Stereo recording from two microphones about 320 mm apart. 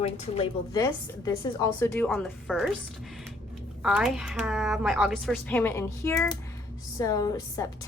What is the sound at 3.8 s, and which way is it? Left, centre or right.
A woman's voice, centre.